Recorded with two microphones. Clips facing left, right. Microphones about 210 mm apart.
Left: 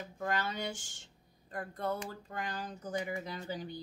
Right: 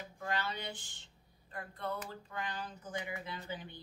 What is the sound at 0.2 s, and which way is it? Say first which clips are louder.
Speech: left 3 dB; 45° left (ahead or behind).